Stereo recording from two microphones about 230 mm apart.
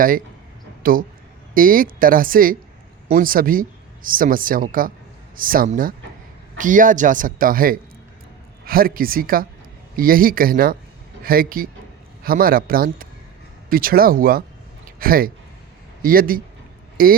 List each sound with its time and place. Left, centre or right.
0.8 s speech: right